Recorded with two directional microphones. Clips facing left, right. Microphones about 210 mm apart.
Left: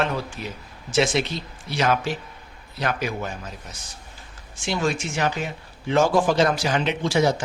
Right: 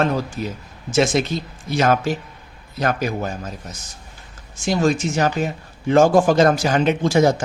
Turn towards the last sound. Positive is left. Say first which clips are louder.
# right 5 dB
turn(degrees=-45)  # may be behind; listen again after turning